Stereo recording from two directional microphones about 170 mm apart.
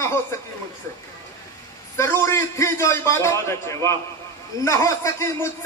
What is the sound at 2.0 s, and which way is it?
A man's voice, 15° left (ahead or behind).